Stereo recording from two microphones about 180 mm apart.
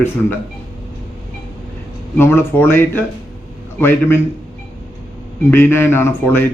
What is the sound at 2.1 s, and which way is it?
Speech, 10° left (ahead or behind).